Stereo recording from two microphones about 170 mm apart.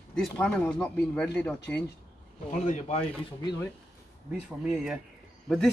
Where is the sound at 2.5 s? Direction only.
45° left (ahead or behind).